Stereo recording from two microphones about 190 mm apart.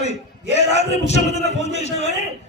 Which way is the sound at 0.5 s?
35° left (ahead or behind).